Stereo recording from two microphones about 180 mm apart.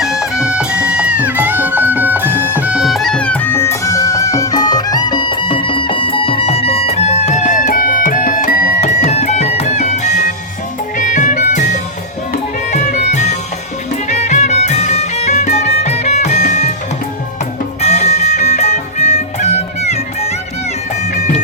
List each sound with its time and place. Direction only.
0.0 s music: 5° right (ahead or behind); by 16.7 s 40° left (ahead or behind)
17.7 s music: 40° left (ahead or behind)